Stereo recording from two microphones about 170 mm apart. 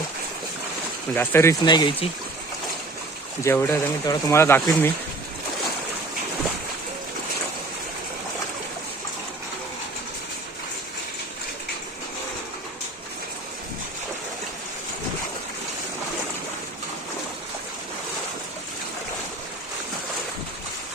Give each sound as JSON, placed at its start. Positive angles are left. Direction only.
{"t": 1.1, "sound": "speech", "side_deg": 10}
{"t": 1.6, "sound": "speech", "side_deg": 25}
{"t": 3.4, "sound": "speech", "side_deg": 15}